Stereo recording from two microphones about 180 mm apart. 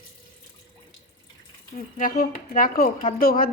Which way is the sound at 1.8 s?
50° left (ahead or behind).